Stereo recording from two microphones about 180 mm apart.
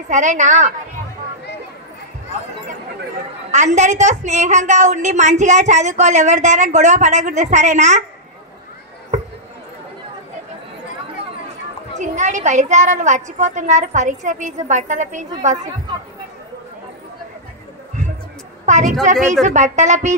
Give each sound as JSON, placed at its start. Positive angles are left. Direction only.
{"t": 0.1, "sound": "a woman's voice", "side_deg": -40}
{"t": 3.5, "sound": "a woman's voice", "side_deg": -40}
{"t": 12.0, "sound": "a woman's voice", "side_deg": -40}
{"t": 18.7, "sound": "a woman's voice", "side_deg": -40}